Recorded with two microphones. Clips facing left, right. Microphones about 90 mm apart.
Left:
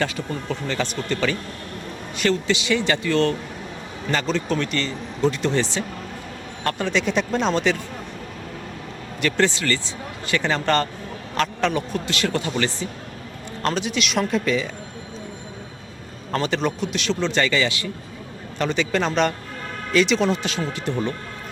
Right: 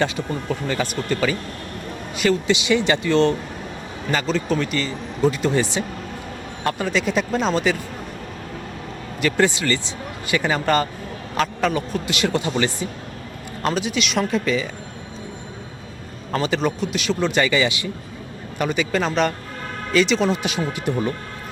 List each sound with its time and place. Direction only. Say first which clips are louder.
0.0 s speech: right 3 dB; 20° right (ahead or behind)
2.5 s speech: right 3 dB; 15° right (ahead or behind)
4.1 s speech: right 1 dB; 5° right (ahead or behind)
9.2 s a man's voice: right 2 dB; 10° right (ahead or behind)
12.1 s speech: right 3 dB; 15° right (ahead or behind)
13.6 s speech: right 1 dB; 5° right (ahead or behind)
16.3 s speech: right 1 dB; centre (ahead or behind)
20.4 s speech: right 2 dB; 10° right (ahead or behind)